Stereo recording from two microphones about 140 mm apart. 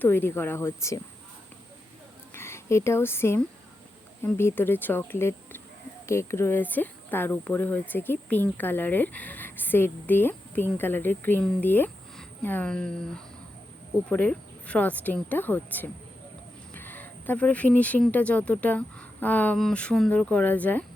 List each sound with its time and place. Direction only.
0.0 s speech: 15° left (ahead or behind)
2.3 s a woman's voice: 20° left (ahead or behind)